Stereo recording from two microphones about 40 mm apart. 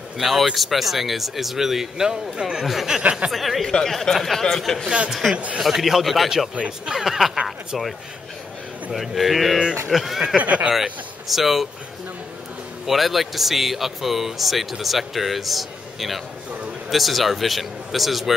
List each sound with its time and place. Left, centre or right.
0.2 s speech: centre
2.6 s speech: centre
3.0 s speech: right
3.3 s speech: centre
3.6 s speech: centre
4.8 s speech: right
5.6 s speech: centre
7.4 s a sound: centre
8.9 s speech: centre
10.4 s speech: right
10.7 s speech: centre
12.8 s speech: centre